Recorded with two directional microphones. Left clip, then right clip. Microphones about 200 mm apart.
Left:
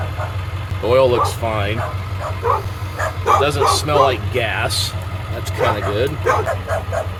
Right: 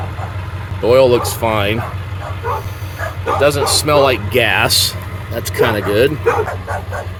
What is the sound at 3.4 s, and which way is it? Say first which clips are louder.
A man's voice: right 2 dB; 30° right (ahead or behind).